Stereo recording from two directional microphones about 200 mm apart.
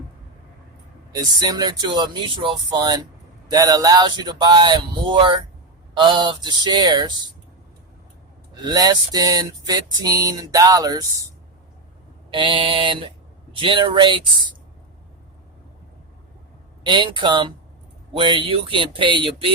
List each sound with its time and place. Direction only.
1.1 s speech: 20° right (ahead or behind)
8.6 s a sound: 20° right (ahead or behind)
12.3 s speech: 25° right (ahead or behind)
16.8 s speech: 25° right (ahead or behind)